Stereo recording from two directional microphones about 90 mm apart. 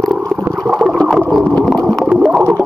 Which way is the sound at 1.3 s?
Centre (ahead or behind).